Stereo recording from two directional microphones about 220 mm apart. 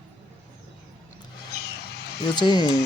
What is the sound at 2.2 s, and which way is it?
Speech, 20° left (ahead or behind).